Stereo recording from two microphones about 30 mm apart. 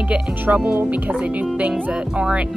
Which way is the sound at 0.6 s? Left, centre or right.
Right.